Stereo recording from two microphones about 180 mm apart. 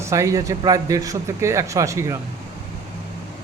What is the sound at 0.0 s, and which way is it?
Speech, 15° right (ahead or behind).